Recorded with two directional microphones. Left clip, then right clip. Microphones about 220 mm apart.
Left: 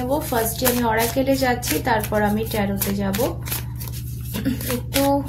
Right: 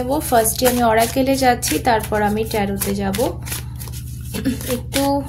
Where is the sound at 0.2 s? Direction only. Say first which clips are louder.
Right 6 dB; 45° right (ahead or behind).